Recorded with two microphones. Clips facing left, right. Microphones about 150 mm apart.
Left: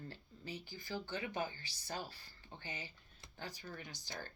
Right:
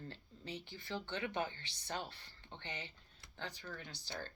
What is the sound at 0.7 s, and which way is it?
Speech, 70° right (ahead or behind).